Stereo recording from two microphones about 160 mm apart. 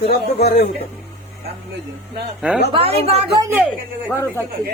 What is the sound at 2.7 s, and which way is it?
Speech, 40° right (ahead or behind).